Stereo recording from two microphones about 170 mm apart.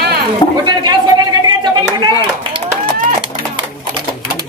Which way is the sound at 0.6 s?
25° right (ahead or behind).